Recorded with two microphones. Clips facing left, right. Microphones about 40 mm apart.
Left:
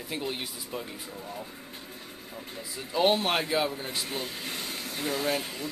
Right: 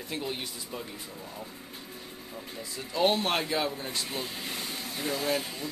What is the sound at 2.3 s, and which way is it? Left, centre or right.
Speech, centre.